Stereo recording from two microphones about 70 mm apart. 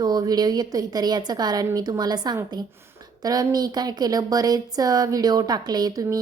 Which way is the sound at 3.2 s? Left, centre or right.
Right.